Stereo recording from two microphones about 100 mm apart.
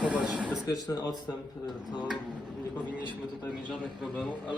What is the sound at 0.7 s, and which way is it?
Speech, 40° left (ahead or behind).